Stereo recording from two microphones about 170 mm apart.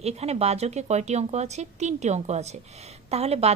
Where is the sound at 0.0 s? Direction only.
40° right (ahead or behind).